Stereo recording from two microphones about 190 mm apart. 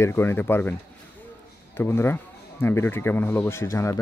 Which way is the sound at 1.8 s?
10° left (ahead or behind).